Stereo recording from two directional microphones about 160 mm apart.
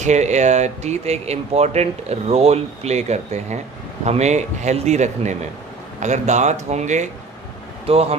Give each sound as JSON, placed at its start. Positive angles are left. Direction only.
{"t": 0.0, "sound": "speech", "side_deg": -45}
{"t": 7.9, "sound": "speech", "side_deg": -35}